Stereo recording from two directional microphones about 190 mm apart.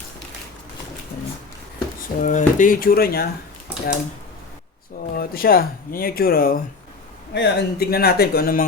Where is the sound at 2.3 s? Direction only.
45° left (ahead or behind).